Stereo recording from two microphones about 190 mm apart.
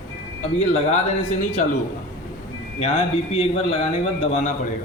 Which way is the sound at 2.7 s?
35° left (ahead or behind).